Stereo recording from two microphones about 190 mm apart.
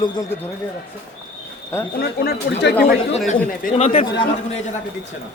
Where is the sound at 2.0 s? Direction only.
60° left (ahead or behind).